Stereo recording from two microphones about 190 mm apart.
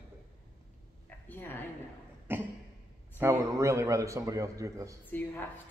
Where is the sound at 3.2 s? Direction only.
15° right (ahead or behind).